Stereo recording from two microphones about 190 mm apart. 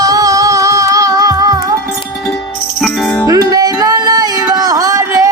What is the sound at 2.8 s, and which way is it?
Music, centre (ahead or behind).